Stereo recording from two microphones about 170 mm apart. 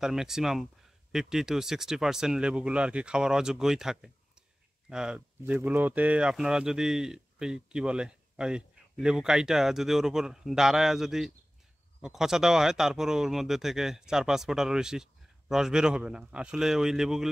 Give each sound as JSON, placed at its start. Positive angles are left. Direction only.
{"t": 0.0, "sound": "speech", "side_deg": -5}